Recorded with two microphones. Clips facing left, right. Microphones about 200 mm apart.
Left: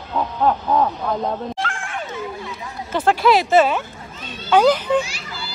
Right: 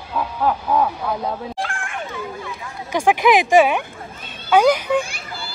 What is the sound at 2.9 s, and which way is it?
Speech, 15° right (ahead or behind).